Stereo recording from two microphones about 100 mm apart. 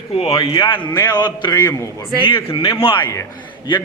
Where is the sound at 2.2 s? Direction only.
60° left (ahead or behind).